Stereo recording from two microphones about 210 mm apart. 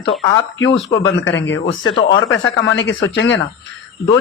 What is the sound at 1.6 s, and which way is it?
Speech, 25° left (ahead or behind).